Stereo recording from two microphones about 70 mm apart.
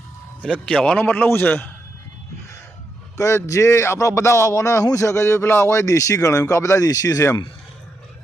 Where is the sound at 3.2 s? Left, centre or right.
Left.